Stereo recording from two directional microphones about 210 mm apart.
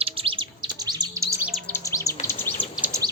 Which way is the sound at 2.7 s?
5° right (ahead or behind).